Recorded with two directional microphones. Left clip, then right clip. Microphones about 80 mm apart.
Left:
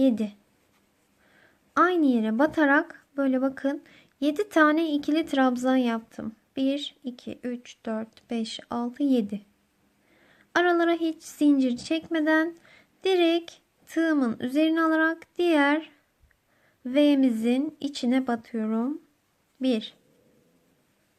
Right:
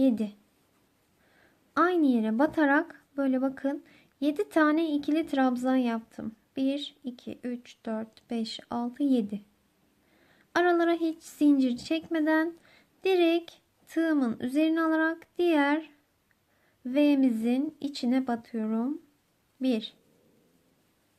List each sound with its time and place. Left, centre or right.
0.0 s speech: centre